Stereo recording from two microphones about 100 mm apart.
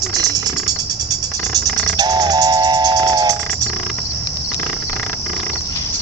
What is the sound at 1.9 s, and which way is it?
Music, 40° right (ahead or behind).